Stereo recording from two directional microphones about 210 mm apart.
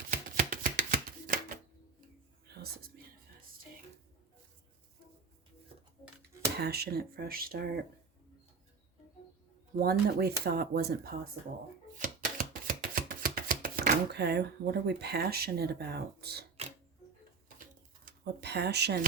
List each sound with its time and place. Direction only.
0.1 s a sound: 40° right (ahead or behind)
2.5 s whispering: 50° right (ahead or behind)
6.6 s speech: 50° right (ahead or behind)
9.8 s speech: 50° right (ahead or behind)
11.9 s chopping: 40° right (ahead or behind)
18.0 s speech: 50° right (ahead or behind)